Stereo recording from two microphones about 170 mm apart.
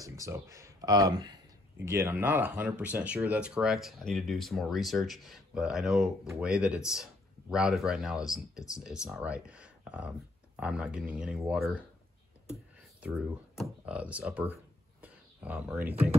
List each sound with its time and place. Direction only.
0.0 s speech: 15° right (ahead or behind); by 11.8 s centre (ahead or behind)
13.0 s speech: 5° right (ahead or behind)
14.5 s a sound: 10° right (ahead or behind)